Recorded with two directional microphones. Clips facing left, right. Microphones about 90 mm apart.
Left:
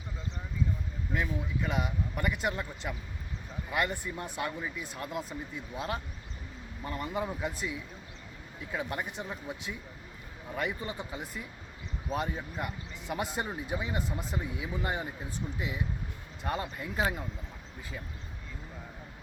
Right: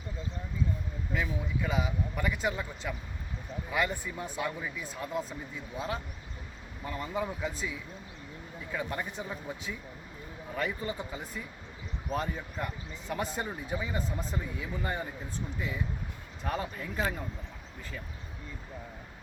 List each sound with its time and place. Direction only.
1.1 s speech: centre (ahead or behind)